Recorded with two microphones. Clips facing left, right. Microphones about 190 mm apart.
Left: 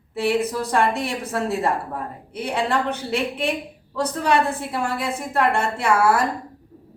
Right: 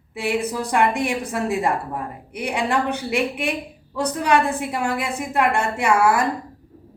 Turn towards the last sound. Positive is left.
turn(degrees=-15)  # may be behind; listen again after turning